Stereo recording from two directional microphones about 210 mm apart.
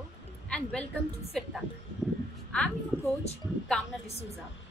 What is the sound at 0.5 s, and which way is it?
Speech, 5° left (ahead or behind).